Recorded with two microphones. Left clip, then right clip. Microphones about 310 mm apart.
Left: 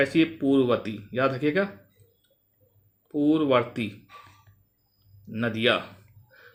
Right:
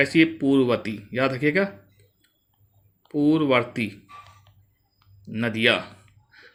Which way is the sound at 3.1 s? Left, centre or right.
Right.